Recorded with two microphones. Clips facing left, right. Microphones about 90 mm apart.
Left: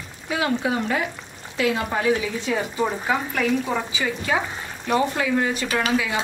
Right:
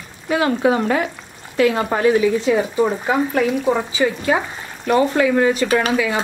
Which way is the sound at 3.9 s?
35° right (ahead or behind).